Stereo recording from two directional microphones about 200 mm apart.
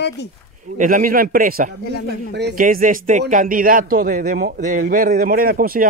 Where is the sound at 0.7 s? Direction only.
45° right (ahead or behind).